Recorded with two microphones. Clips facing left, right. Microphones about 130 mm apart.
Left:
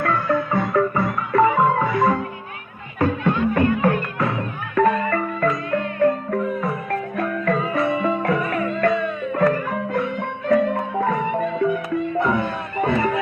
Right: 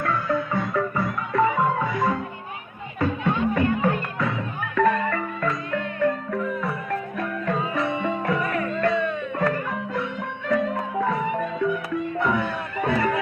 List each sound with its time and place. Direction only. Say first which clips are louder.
0.0 s music: left 4 dB; 60° left (ahead or behind)
7.2 s music: left 8 dB; 65° left (ahead or behind)
7.7 s music: left 4 dB; 55° left (ahead or behind)